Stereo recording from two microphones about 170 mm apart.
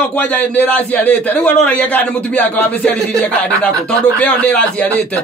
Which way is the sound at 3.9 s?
10° left (ahead or behind).